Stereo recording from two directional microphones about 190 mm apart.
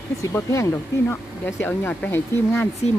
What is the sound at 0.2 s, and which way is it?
Speech, 15° left (ahead or behind).